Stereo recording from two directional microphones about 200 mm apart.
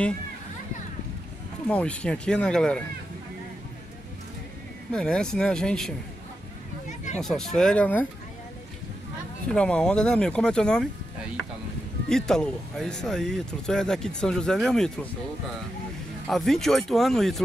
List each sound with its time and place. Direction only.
1.7 s speech: 5° left (ahead or behind)
4.9 s speech: 5° left (ahead or behind)
7.2 s speech: 5° left (ahead or behind)
9.5 s speech: 5° left (ahead or behind)
12.1 s speech: 5° left (ahead or behind)
16.3 s speech: centre (ahead or behind)